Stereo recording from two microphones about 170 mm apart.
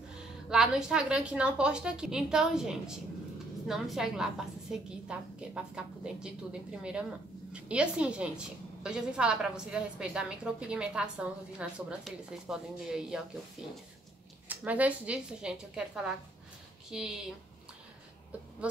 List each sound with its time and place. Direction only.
0.5 s a woman's voice: 5° right (ahead or behind)
14.5 s a woman's voice: 10° right (ahead or behind)